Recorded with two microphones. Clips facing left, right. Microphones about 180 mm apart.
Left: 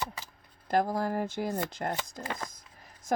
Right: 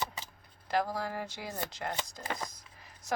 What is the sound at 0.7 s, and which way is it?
Speech, 50° left (ahead or behind).